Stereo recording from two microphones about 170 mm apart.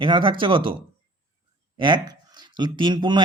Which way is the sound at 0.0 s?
30° right (ahead or behind).